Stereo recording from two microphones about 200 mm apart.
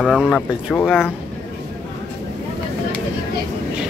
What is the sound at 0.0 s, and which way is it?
Speech, centre (ahead or behind).